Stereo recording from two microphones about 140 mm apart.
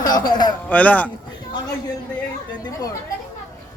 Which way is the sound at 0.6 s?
10° left (ahead or behind).